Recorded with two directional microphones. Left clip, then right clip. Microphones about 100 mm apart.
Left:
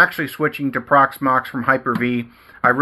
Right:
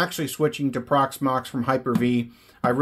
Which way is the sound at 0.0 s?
35° right (ahead or behind).